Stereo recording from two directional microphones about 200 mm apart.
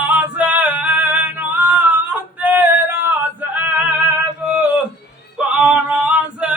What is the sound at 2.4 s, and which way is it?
Yodeling, 10° right (ahead or behind).